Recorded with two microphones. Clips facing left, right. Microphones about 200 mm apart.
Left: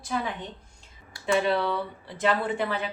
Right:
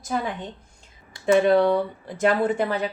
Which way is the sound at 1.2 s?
45° right (ahead or behind).